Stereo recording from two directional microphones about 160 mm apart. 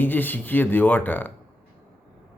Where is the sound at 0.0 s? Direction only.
10° left (ahead or behind).